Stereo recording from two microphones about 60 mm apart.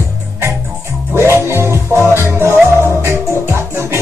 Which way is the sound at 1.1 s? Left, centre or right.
Right.